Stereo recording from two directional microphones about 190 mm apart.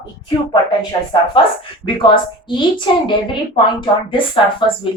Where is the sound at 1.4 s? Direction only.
25° left (ahead or behind).